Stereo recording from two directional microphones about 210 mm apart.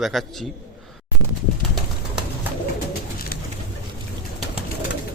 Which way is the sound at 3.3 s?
45° left (ahead or behind).